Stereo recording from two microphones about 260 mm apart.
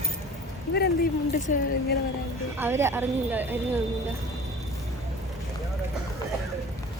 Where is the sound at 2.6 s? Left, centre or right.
Centre.